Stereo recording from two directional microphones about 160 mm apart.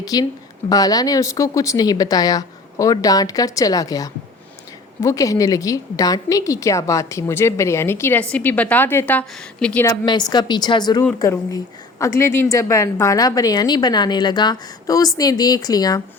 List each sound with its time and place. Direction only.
0.0 s a woman's voice: 25° left (ahead or behind)
9.8 s a woman's voice: 25° left (ahead or behind)